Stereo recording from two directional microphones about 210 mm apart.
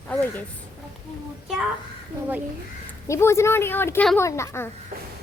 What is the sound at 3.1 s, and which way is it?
A woman's voice, 10° left (ahead or behind).